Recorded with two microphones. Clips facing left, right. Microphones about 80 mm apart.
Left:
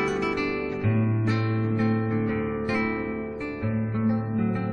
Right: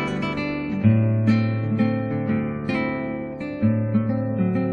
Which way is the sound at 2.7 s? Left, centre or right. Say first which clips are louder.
Right 4 dB; centre.